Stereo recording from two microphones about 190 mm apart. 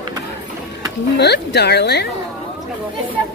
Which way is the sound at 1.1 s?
60° left (ahead or behind).